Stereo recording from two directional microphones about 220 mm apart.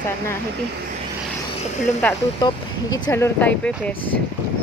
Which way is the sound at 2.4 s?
20° left (ahead or behind).